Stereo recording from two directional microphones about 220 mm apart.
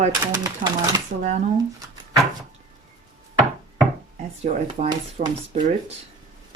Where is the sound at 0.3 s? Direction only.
15° right (ahead or behind).